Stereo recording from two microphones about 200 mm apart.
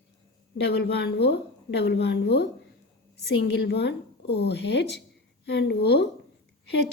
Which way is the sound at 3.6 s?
55° left (ahead or behind).